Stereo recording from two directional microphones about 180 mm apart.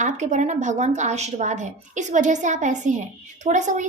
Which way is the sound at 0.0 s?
40° right (ahead or behind).